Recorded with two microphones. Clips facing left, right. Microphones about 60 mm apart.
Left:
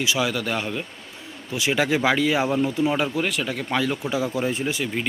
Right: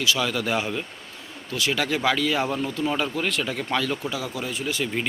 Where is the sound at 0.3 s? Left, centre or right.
Centre.